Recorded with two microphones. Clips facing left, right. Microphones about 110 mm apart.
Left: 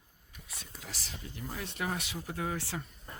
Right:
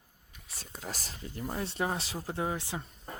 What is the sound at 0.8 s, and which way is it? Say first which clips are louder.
Speech: right 5 dB; 40° right (ahead or behind).